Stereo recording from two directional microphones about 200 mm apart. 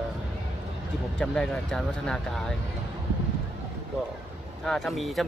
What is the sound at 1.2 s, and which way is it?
Speech, 5° left (ahead or behind).